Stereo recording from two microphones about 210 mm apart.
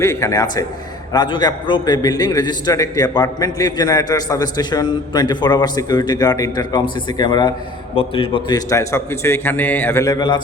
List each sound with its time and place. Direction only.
0.0 s a man's voice: 15° left (ahead or behind)